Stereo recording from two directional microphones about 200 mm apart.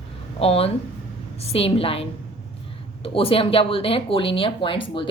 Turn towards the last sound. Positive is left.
turn(degrees=25)  # may be behind; listen again after turning